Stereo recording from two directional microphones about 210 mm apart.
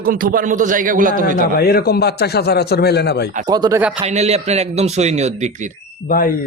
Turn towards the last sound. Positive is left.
turn(degrees=45)  # may be behind; listen again after turning